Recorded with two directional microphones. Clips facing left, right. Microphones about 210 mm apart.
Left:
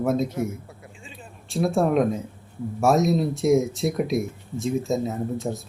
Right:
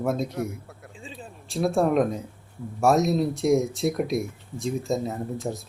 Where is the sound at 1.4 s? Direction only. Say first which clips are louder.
Left 1 dB; centre (ahead or behind).